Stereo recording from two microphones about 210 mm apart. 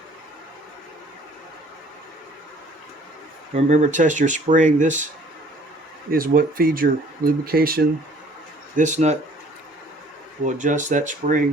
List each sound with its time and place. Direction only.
3.5 s speech: 35° right (ahead or behind)
6.1 s speech: 45° right (ahead or behind)
8.7 s speech: 35° right (ahead or behind)
10.4 s speech: 35° right (ahead or behind)